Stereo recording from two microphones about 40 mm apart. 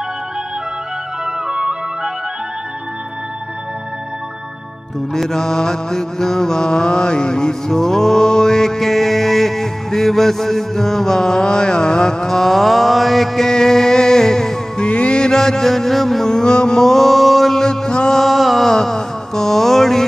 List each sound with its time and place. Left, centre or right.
1.2 s music: centre
5.1 s mantra: centre
14.8 s mantra: left; by 16.3 s centre
16.3 s mantra: centre
17.6 s music: centre
18.2 s music: centre
18.7 s a sound: centre